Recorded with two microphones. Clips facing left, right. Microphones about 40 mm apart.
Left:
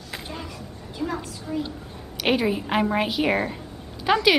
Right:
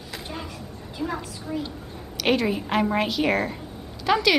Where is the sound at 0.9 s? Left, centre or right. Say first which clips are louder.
Left 1 dB; centre.